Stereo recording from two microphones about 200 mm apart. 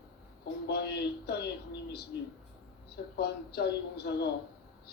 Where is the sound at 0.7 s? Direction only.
55° left (ahead or behind).